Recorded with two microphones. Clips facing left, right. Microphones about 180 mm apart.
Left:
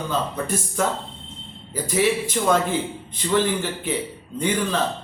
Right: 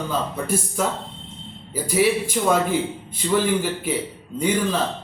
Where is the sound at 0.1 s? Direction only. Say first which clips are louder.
Even; 10° right (ahead or behind).